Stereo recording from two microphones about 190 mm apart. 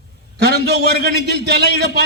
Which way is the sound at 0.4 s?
60° right (ahead or behind).